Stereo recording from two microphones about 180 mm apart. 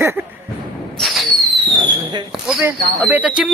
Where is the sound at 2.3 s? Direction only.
5° right (ahead or behind).